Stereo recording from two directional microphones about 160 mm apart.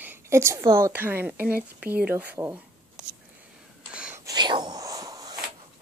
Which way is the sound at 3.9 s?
5° right (ahead or behind).